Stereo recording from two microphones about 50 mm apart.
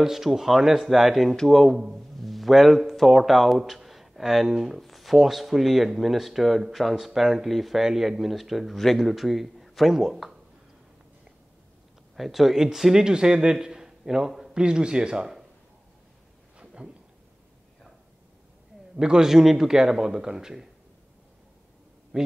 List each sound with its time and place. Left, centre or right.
0.0 s speech: centre
1.3 s speech: centre
12.2 s a man's voice: centre
16.5 s a sound: centre
18.9 s a man's voice: centre
22.1 s a man's voice: right